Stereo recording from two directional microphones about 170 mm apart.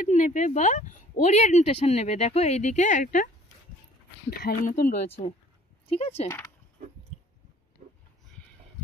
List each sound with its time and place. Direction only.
0.1 s speech: 45° left (ahead or behind)
4.3 s speech: 50° left (ahead or behind)
5.9 s speech: 35° left (ahead or behind)